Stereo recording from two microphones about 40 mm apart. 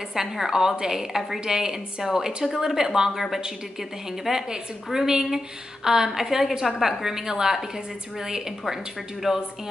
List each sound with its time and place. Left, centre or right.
0.1 s a woman's voice: centre